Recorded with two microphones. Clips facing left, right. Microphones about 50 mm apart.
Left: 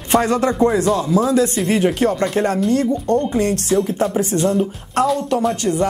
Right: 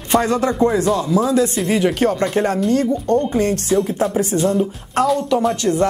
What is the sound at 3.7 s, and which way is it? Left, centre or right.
Speech, centre.